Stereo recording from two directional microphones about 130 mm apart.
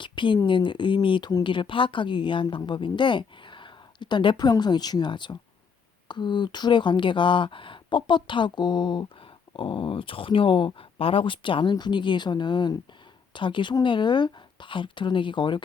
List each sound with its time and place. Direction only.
0.0 s a sound: 40° left (ahead or behind)
0.4 s speech: 40° left (ahead or behind)
1.3 s speech: 25° left (ahead or behind)
1.5 s speech: 40° left (ahead or behind)